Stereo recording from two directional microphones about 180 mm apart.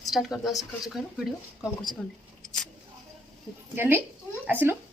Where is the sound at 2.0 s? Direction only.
5° left (ahead or behind).